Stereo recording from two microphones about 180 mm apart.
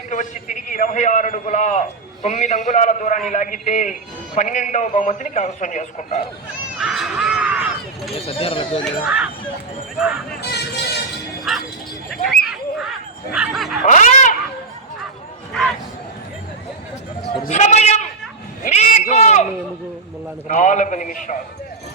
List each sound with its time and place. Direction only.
0.1 s a man's voice: 45° left (ahead or behind)
6.7 s a sound: centre (ahead or behind)
8.2 s a man's voice: 30° left (ahead or behind)
8.8 s speech: 5° right (ahead or behind)
10.4 s vehicle: 65° left (ahead or behind)
11.5 s music: 5° right (ahead or behind)
12.1 s speech: 5° left (ahead or behind)
13.8 s speech: 45° left (ahead or behind)
17.4 s a man's voice: 40° left (ahead or behind)
20.5 s a man's voice: 45° left (ahead or behind)